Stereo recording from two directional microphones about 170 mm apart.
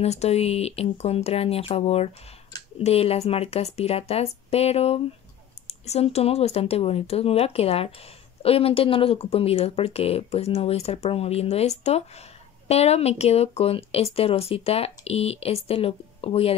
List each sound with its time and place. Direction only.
0.0 s speech: 40° left (ahead or behind)